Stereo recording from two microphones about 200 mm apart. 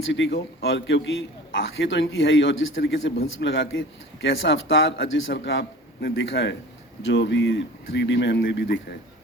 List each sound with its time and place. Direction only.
0.1 s a man's voice: 65° left (ahead or behind)